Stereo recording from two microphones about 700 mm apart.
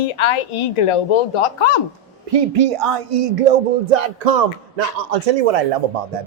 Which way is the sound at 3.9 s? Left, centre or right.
Right.